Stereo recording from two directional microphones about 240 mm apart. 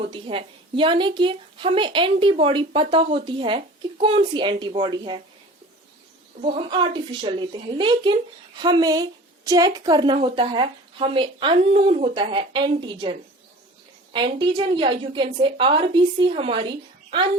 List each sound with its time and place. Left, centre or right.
0.0 s a woman's voice: right
6.4 s a woman's voice: right